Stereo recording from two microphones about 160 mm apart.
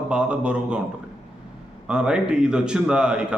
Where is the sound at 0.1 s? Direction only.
5° right (ahead or behind).